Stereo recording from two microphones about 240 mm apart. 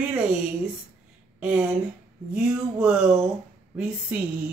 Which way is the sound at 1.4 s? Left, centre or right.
Centre.